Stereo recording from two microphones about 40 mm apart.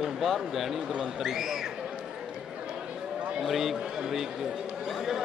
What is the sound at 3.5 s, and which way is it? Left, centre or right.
Speech, centre.